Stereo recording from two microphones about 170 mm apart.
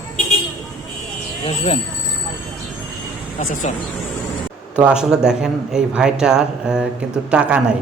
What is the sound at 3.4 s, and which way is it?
Speech, 50° left (ahead or behind).